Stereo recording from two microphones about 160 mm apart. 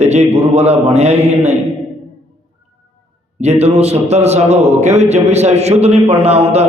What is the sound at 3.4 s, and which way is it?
A man's voice, 40° right (ahead or behind).